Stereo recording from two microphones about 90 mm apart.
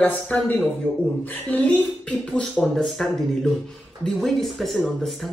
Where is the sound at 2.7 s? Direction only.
5° left (ahead or behind).